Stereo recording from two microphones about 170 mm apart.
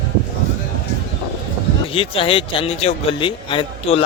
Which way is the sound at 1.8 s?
35° left (ahead or behind).